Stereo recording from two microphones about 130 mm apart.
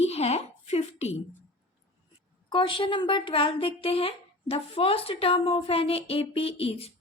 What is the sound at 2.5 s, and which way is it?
Speech, 40° left (ahead or behind).